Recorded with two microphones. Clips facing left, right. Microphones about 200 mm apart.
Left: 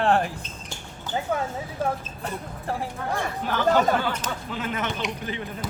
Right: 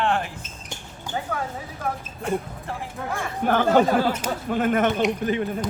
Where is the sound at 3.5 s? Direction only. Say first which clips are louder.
Right 3 dB; 50° right (ahead or behind).